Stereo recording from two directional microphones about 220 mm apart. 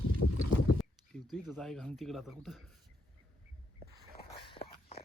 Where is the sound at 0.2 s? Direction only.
90° left.